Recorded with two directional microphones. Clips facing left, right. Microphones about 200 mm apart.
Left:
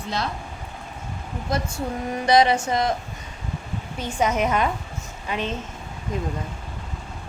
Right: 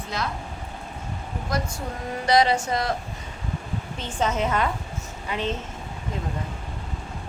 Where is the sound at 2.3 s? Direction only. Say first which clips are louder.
Left 2 dB; 20° left (ahead or behind).